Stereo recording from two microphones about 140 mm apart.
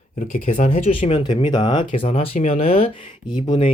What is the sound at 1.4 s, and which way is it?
Speech, 35° left (ahead or behind).